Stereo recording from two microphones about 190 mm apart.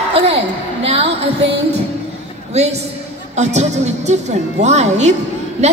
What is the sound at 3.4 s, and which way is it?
A woman's voice, 35° right (ahead or behind).